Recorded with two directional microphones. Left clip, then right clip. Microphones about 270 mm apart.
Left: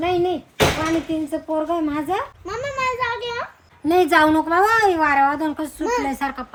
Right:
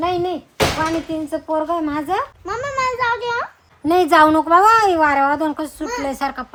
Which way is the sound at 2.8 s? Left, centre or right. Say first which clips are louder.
Right 3 dB; centre.